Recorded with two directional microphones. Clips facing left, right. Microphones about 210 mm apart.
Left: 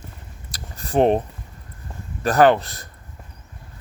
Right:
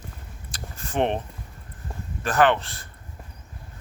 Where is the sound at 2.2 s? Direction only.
40° left (ahead or behind).